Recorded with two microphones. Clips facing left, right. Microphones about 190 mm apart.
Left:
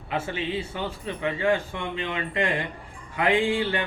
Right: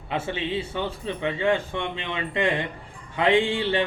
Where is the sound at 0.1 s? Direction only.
25° right (ahead or behind).